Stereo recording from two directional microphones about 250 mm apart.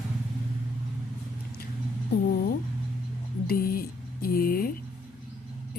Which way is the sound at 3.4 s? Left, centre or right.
Left.